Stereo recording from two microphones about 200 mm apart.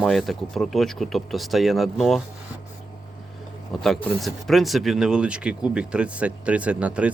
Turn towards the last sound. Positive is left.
turn(degrees=-5)  # may be behind; listen again after turning